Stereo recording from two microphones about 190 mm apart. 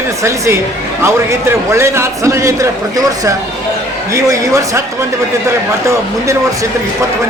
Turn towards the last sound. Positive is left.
turn(degrees=-15)  # may be behind; listen again after turning